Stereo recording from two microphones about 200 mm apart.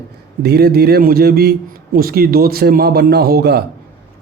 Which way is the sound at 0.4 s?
55° right (ahead or behind).